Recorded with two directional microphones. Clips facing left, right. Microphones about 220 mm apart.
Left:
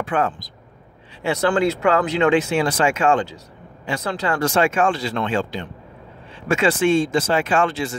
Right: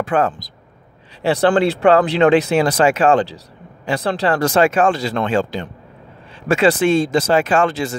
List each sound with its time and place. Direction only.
0.0 s speech: 40° right (ahead or behind)